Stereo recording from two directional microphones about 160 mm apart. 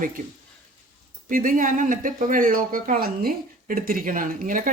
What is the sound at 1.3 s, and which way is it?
Speech, 55° right (ahead or behind).